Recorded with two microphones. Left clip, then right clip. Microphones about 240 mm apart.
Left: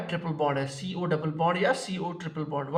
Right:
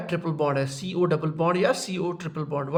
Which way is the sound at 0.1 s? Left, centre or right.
Right.